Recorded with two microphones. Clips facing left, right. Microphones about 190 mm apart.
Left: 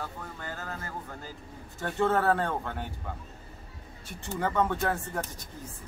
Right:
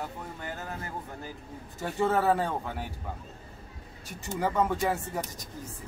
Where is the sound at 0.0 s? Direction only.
15° right (ahead or behind).